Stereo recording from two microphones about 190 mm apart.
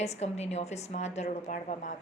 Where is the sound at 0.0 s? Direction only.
35° left (ahead or behind).